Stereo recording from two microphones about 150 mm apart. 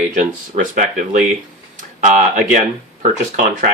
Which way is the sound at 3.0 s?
55° right (ahead or behind).